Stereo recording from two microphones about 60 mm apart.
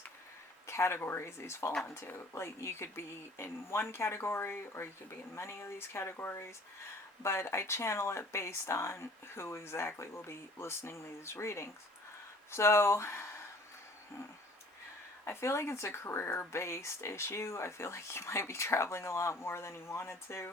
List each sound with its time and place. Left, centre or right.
0.7 s speech: left
15.2 s speech: left